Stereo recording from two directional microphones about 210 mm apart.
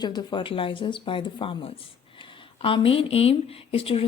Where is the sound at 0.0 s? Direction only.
20° left (ahead or behind).